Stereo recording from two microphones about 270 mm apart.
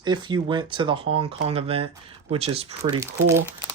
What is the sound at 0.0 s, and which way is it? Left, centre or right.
Speech, centre.